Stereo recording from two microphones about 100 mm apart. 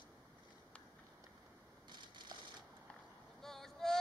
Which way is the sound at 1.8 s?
45° right (ahead or behind).